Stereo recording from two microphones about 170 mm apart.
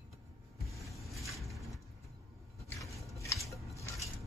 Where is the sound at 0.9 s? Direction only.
Centre (ahead or behind).